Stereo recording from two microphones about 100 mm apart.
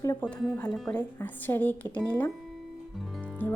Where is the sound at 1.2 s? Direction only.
20° left (ahead or behind).